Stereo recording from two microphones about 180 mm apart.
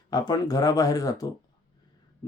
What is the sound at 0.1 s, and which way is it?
Speech, 20° left (ahead or behind).